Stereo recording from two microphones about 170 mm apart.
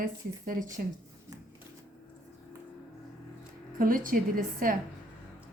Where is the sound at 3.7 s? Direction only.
55° right (ahead or behind).